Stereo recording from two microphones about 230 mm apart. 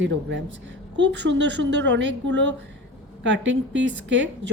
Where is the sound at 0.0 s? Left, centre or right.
Right.